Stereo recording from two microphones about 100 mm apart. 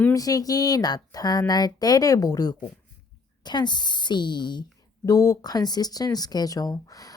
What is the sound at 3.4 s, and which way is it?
A woman's voice, 45° left (ahead or behind).